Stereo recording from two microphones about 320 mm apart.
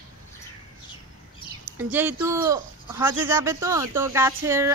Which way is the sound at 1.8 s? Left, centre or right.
Centre.